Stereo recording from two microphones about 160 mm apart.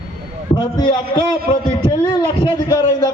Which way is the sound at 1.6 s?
30° left (ahead or behind).